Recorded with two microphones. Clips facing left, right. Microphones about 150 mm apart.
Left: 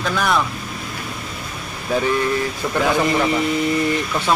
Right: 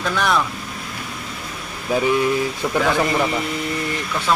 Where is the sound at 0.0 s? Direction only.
Centre (ahead or behind).